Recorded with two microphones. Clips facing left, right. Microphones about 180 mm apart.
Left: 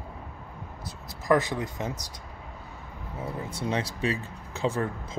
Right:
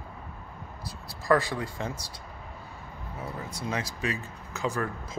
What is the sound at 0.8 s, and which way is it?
Speech, 20° left (ahead or behind).